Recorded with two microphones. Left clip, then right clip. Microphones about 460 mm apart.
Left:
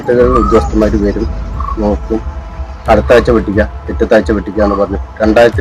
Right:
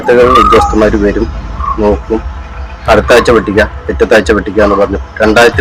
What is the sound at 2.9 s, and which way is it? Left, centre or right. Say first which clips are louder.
A man's voice: right 2 dB; left.